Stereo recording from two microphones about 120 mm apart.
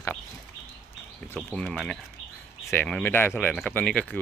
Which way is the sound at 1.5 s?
Centre (ahead or behind).